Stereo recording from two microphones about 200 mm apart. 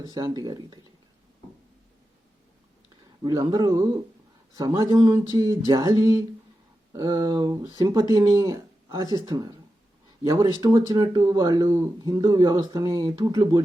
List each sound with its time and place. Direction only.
0.0 s speech: 20° right (ahead or behind)
3.2 s speech: 20° right (ahead or behind)